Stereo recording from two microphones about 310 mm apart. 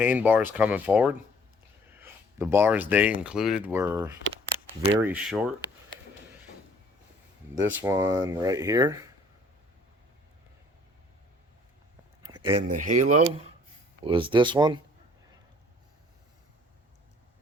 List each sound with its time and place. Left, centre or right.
0.0 s speech: centre
7.7 s speech: centre
12.2 s speech: centre